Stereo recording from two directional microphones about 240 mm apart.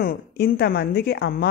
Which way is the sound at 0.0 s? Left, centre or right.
Left.